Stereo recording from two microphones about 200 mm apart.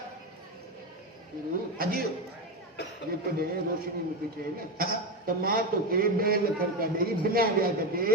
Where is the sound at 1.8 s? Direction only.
50° right (ahead or behind).